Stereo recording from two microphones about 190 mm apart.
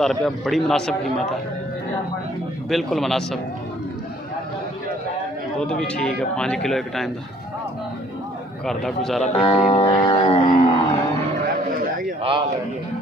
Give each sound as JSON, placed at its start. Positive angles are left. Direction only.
{"t": 0.0, "sound": "a man's voice", "side_deg": 0}
{"t": 2.7, "sound": "a man's voice", "side_deg": 0}
{"t": 5.6, "sound": "a man's voice", "side_deg": 5}
{"t": 8.6, "sound": "a man's voice", "side_deg": 0}
{"t": 9.3, "sound": "speech", "side_deg": 35}
{"t": 10.0, "sound": "a sound", "side_deg": 25}
{"t": 12.2, "sound": "a man's voice", "side_deg": -30}